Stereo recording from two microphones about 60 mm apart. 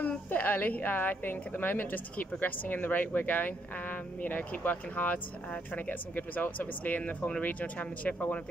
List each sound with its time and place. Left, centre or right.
0.3 s a woman's voice: left